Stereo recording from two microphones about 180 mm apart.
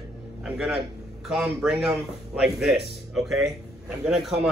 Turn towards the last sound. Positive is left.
turn(degrees=0)  # may be behind; listen again after turning